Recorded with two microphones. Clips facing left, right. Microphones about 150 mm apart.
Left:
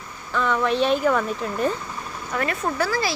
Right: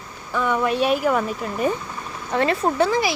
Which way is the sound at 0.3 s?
10° right (ahead or behind).